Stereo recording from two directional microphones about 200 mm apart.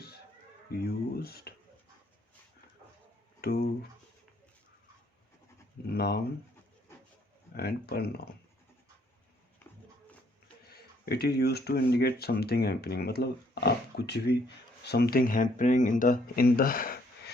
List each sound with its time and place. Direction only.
1.1 s a sound: 50° left (ahead or behind)
3.4 s speech: 50° left (ahead or behind)
5.9 s speech: 50° left (ahead or behind)
7.5 s speech: 50° left (ahead or behind)
10.7 s speech: 50° left (ahead or behind)